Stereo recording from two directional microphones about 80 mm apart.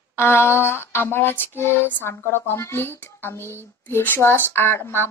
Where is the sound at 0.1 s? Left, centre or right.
Left.